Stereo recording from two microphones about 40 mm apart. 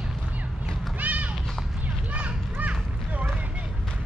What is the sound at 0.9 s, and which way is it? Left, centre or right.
Run, right.